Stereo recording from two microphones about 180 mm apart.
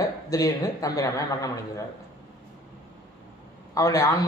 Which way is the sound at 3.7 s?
20° left (ahead or behind).